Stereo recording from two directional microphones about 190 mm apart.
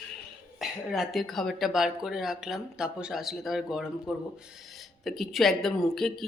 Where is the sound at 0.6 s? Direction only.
Centre (ahead or behind).